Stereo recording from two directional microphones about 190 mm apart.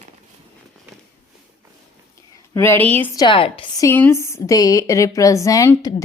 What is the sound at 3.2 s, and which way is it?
Speech, 25° left (ahead or behind).